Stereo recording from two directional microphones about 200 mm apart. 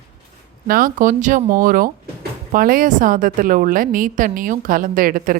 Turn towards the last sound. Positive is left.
turn(degrees=-45)  # may be behind; listen again after turning